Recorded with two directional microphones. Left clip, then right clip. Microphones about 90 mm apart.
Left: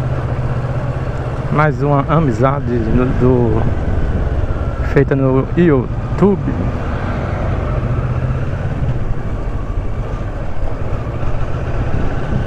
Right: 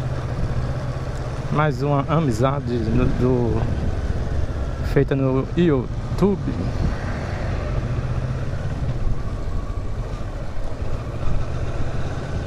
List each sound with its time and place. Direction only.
1.5 s speech: 15° right (ahead or behind)
4.9 s speech: 20° right (ahead or behind)